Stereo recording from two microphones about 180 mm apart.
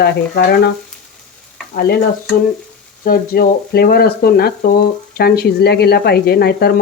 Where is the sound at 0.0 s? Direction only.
65° left (ahead or behind).